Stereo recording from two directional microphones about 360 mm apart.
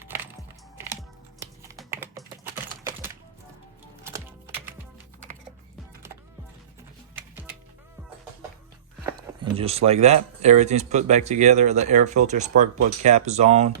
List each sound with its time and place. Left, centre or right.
1.4 s typing: centre
4.0 s typing: centre
7.2 s music: centre
9.0 s speech: centre